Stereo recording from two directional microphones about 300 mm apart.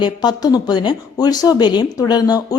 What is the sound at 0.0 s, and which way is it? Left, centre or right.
Speech, centre.